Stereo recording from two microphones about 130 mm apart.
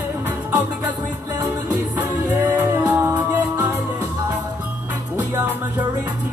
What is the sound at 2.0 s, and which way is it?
Music, 15° right (ahead or behind).